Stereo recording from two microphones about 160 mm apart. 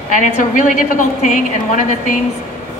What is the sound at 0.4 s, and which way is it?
A woman's voice, 55° left (ahead or behind).